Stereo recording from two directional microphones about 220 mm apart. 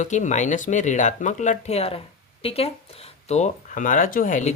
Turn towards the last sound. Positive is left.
turn(degrees=35)  # may be behind; listen again after turning